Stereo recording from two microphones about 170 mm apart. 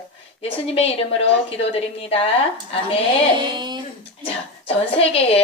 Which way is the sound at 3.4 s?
25° right (ahead or behind).